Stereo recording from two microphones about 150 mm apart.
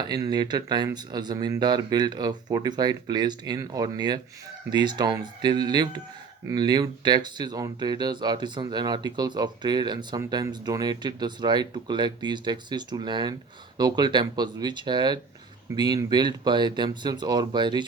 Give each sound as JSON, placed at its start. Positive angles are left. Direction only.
{"t": 0.0, "sound": "speech", "side_deg": -25}